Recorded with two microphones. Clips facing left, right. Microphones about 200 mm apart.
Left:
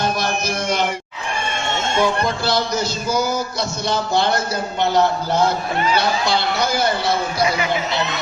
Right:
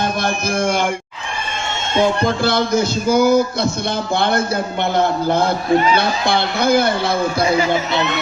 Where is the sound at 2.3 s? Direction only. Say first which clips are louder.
Right 4 dB; 55° right (ahead or behind).